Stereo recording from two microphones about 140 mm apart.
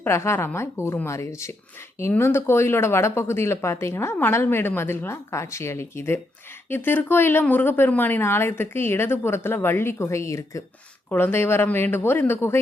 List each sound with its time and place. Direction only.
0.0 s a woman's voice: 20° left (ahead or behind)